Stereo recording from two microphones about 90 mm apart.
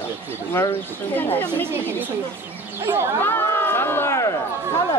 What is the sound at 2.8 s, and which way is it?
Speech, 30° right (ahead or behind).